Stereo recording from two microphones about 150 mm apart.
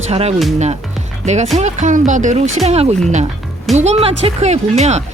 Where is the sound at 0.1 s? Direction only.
45° right (ahead or behind).